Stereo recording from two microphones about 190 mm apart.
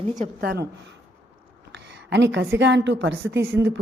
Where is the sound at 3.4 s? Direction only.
15° right (ahead or behind).